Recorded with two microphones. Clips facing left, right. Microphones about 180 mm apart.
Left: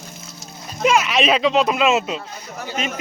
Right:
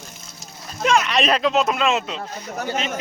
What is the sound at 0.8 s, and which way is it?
A man's voice, 5° left (ahead or behind).